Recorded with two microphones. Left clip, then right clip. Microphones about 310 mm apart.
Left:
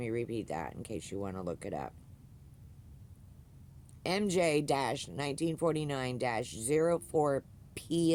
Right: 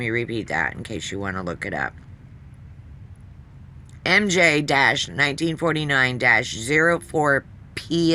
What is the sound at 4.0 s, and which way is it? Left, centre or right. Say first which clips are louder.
Speech: right 14 dB; left.